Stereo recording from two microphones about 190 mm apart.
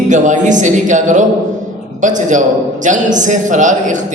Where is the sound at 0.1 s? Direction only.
40° right (ahead or behind).